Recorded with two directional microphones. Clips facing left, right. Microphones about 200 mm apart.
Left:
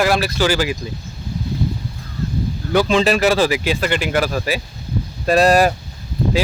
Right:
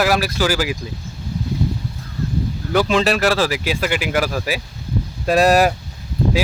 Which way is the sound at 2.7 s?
Centre (ahead or behind).